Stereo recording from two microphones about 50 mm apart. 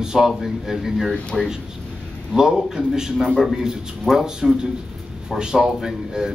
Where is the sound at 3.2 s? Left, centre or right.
Centre.